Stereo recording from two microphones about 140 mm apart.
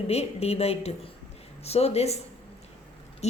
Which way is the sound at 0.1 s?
50° left (ahead or behind).